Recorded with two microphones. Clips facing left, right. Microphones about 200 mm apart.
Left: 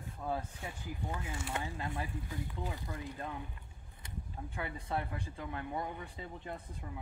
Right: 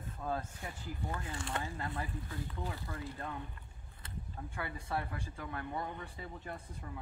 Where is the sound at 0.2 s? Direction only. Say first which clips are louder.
Left 1 dB; 15° left (ahead or behind).